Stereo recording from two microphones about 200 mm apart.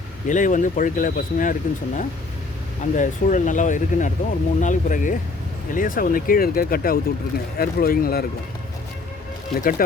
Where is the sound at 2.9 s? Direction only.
40° left (ahead or behind).